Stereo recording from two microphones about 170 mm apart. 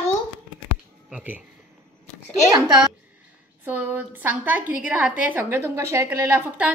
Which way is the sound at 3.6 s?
10° right (ahead or behind).